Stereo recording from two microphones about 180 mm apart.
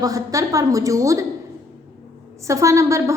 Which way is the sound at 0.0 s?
20° right (ahead or behind).